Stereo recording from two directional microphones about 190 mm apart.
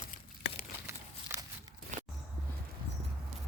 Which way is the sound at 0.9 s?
15° right (ahead or behind).